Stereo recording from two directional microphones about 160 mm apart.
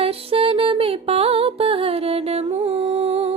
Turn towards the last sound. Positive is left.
turn(degrees=-40)  # may be behind; listen again after turning